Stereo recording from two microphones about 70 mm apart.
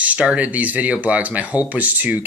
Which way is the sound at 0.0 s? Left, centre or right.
Centre.